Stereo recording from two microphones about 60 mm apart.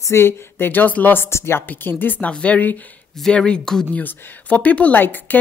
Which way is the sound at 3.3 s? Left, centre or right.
Centre.